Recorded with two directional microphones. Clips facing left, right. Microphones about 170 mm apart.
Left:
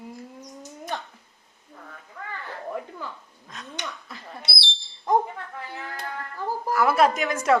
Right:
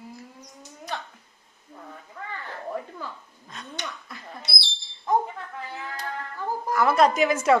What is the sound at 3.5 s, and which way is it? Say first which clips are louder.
Speech: even; centre (ahead or behind).